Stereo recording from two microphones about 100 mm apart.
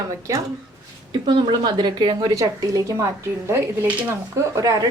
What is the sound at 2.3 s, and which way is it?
Speech, 35° right (ahead or behind).